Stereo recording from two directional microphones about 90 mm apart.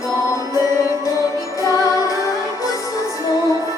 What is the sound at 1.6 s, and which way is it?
Music, 40° left (ahead or behind).